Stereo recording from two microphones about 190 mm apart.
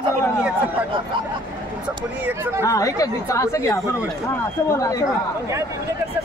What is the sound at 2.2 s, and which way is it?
Speech, 10° right (ahead or behind).